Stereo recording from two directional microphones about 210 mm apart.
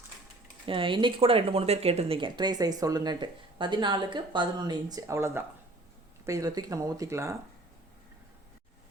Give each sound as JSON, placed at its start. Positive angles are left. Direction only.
{"t": 0.6, "sound": "speech", "side_deg": -25}